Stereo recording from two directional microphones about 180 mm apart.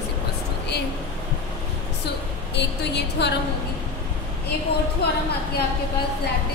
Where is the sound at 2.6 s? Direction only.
70° left (ahead or behind).